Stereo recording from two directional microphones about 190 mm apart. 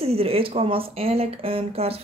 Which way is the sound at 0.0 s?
30° right (ahead or behind).